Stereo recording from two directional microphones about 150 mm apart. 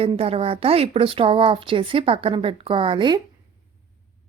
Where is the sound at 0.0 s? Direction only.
40° right (ahead or behind).